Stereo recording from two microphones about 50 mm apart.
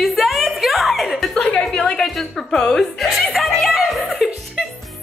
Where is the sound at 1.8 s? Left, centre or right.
Centre.